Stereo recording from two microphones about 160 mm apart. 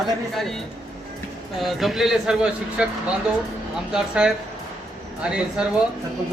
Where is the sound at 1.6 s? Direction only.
Centre (ahead or behind).